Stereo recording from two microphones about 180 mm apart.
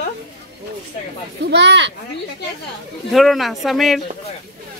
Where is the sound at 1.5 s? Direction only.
75° right (ahead or behind).